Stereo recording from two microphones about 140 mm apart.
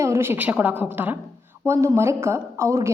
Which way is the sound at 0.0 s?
20° right (ahead or behind).